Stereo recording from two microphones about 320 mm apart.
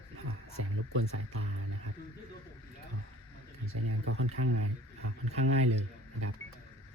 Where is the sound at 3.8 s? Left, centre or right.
Right.